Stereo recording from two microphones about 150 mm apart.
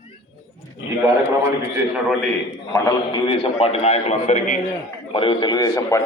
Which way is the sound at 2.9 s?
30° left (ahead or behind).